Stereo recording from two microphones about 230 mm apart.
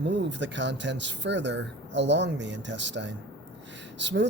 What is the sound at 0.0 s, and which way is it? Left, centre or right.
Speech, right.